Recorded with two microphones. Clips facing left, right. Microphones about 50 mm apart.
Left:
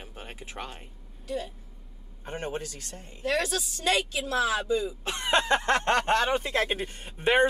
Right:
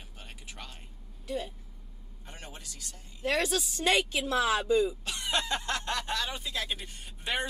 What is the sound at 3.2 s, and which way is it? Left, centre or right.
A woman's voice, right.